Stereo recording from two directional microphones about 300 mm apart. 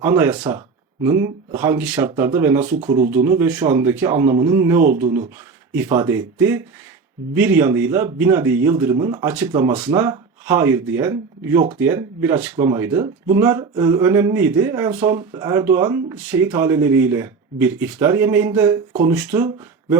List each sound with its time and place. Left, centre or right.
0.0 s speech: centre
2.6 s speech: right
3.2 s speech: centre